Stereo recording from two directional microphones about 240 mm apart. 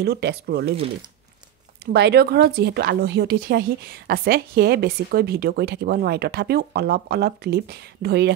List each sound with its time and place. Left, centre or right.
0.0 s speech: right
1.9 s speech: right